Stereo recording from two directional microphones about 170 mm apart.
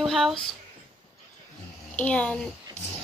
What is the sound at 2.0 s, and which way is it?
Speech, 10° left (ahead or behind).